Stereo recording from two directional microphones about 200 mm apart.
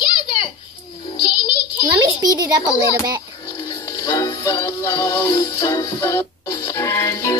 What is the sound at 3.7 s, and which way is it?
Music, 15° left (ahead or behind).